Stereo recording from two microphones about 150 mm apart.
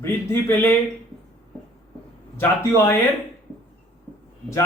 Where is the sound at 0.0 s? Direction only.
15° left (ahead or behind).